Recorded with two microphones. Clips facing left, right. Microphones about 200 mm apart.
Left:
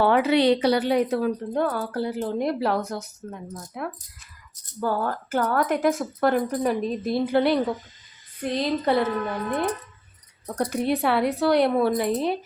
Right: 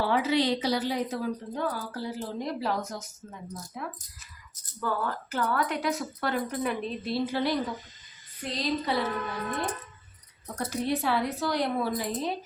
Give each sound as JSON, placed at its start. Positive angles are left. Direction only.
{"t": 0.0, "sound": "a woman's voice", "side_deg": 65}
{"t": 4.8, "sound": "a woman's voice", "side_deg": 45}
{"t": 10.6, "sound": "a woman's voice", "side_deg": 60}